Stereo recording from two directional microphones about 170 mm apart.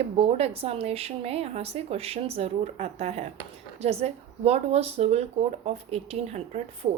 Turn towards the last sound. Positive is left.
turn(degrees=-40)  # may be behind; listen again after turning